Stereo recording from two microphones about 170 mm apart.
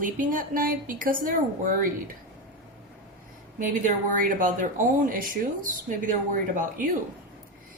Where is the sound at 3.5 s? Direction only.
50° right (ahead or behind).